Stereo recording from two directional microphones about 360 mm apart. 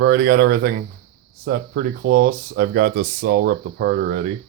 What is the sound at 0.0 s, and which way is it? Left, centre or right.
Speech, right.